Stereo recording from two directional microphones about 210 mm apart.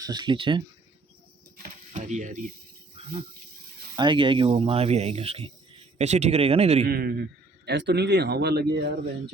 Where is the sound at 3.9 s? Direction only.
20° right (ahead or behind).